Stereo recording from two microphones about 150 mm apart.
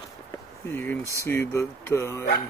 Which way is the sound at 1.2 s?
20° left (ahead or behind).